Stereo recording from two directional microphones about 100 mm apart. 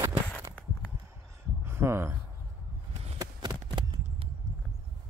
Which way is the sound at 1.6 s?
25° right (ahead or behind).